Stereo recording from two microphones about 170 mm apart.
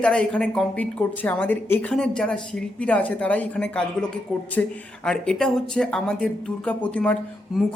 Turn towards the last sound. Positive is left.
turn(degrees=5)  # may be behind; listen again after turning